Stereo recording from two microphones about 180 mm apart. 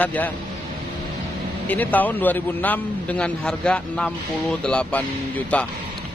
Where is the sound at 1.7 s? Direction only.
10° left (ahead or behind).